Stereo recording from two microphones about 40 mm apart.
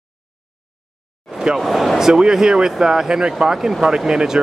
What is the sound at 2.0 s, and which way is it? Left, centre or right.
Speech, centre.